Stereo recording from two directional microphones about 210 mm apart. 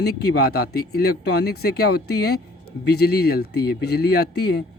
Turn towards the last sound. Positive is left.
turn(degrees=50)  # may be behind; listen again after turning